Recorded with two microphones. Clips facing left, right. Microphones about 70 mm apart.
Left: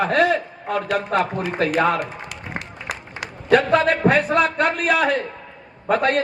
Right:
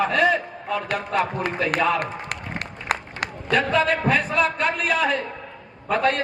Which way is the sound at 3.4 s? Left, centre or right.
Left.